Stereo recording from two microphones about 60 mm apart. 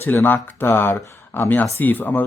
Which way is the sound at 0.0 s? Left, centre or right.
Left.